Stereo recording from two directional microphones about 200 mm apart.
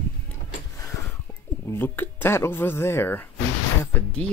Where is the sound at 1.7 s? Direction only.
10° left (ahead or behind).